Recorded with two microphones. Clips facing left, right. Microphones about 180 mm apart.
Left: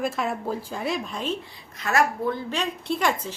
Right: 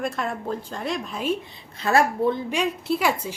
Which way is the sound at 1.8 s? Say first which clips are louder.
Right 3 dB; 30° right (ahead or behind).